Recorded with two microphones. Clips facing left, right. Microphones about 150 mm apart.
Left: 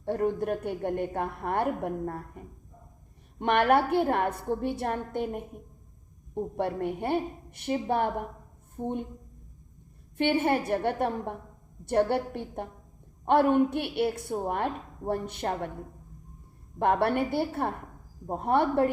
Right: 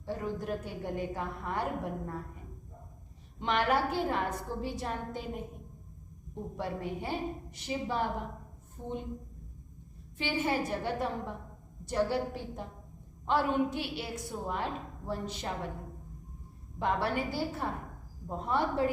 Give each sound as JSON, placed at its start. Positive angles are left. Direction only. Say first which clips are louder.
{"t": 0.0, "sound": "a woman's voice", "louder": "left 8 dB", "side_deg": 60}
{"t": 3.3, "sound": "a woman's voice", "louder": "left 6 dB", "side_deg": 55}
{"t": 10.2, "sound": "a woman's voice", "louder": "left 6 dB", "side_deg": 60}
{"t": 16.7, "sound": "a woman's voice", "louder": "left 6 dB", "side_deg": 60}